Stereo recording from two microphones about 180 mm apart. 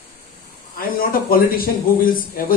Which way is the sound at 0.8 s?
55° left (ahead or behind).